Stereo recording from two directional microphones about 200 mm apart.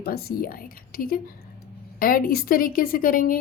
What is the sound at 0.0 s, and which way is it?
A woman's voice, 50° left (ahead or behind).